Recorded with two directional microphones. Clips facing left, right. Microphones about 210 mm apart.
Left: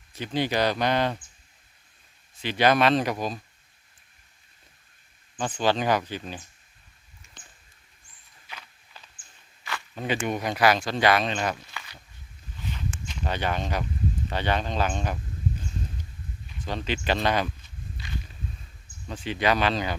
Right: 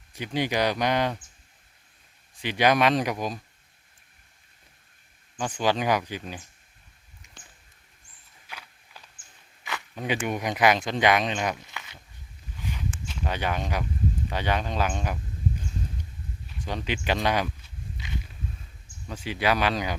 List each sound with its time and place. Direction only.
0.1 s speech: 15° right (ahead or behind)
2.3 s speech: 15° right (ahead or behind)
5.4 s speech: 10° right (ahead or behind)
8.4 s a sound: 10° right (ahead or behind)
9.6 s speech: 15° right (ahead or behind)
12.5 s a sound: 10° right (ahead or behind)
14.3 s speech: 10° right (ahead or behind)
16.6 s walk: 15° right (ahead or behind)
19.0 s speech: 10° right (ahead or behind)